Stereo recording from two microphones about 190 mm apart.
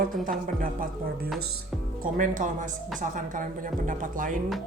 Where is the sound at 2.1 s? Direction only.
40° right (ahead or behind).